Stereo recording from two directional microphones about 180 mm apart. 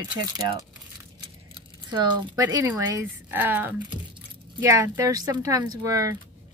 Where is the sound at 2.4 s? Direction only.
20° right (ahead or behind).